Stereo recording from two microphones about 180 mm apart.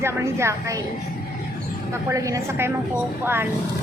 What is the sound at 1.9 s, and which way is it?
A woman's voice, 15° right (ahead or behind).